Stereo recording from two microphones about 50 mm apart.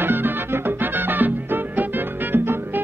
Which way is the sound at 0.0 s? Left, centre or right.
Right.